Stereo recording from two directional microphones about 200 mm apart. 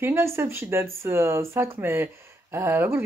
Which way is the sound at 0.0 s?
10° right (ahead or behind).